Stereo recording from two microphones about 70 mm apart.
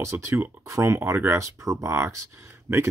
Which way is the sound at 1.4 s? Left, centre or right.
Right.